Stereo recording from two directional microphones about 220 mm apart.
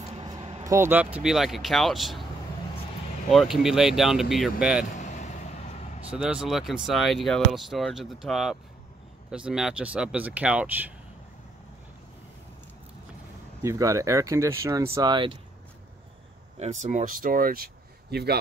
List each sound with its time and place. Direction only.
0.1 s a sound: 20° right (ahead or behind)
0.7 s speech: 10° right (ahead or behind)
3.3 s speech: centre (ahead or behind)
4.9 s vehicle: 35° left (ahead or behind)
6.0 s speech: 5° right (ahead or behind)
13.6 s speech: 15° right (ahead or behind)
16.5 s speech: 30° right (ahead or behind); by 18.4 s 45° right (ahead or behind)